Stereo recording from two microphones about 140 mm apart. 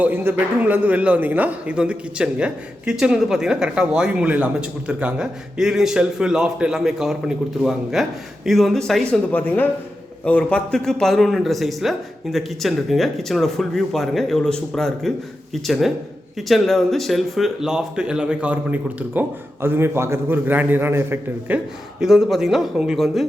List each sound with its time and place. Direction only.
0.0 s a man's voice: 15° right (ahead or behind); by 9.0 s centre (ahead or behind)
10.2 s a man's voice: 10° left (ahead or behind); by 21.6 s 15° right (ahead or behind)
22.0 s a man's voice: centre (ahead or behind)